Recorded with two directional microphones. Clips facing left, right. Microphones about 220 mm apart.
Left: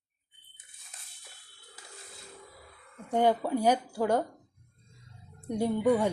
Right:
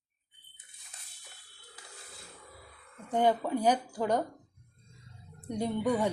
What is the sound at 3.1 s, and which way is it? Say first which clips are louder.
Speech: left 2 dB; 10° left (ahead or behind).